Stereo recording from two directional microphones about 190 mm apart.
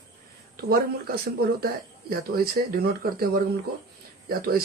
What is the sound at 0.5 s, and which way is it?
Speech, 50° right (ahead or behind).